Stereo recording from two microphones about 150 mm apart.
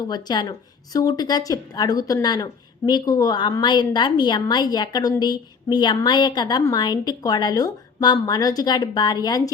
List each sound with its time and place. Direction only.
0.0 s a woman's voice: 25° left (ahead or behind)